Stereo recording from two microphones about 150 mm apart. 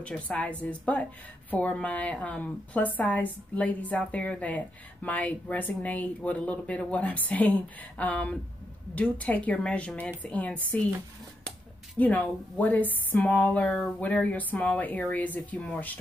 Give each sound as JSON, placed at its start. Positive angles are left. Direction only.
{"t": 0.0, "sound": "a woman's voice", "side_deg": 10}